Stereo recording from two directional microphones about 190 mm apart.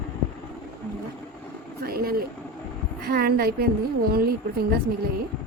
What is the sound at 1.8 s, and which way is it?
A woman's voice, 50° right (ahead or behind).